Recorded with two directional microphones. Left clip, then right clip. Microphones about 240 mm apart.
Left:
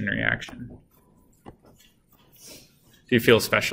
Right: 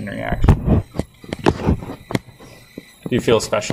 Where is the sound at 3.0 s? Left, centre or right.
Centre.